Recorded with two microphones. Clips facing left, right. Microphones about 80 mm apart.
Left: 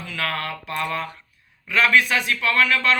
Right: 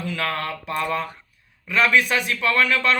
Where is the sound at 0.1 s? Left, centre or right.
Right.